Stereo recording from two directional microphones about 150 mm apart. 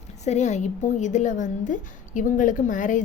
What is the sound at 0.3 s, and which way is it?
A woman's voice, 50° left (ahead or behind).